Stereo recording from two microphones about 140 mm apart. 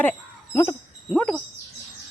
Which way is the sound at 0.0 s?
15° left (ahead or behind).